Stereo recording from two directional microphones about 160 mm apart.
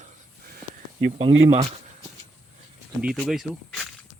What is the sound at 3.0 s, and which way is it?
Speech, centre (ahead or behind).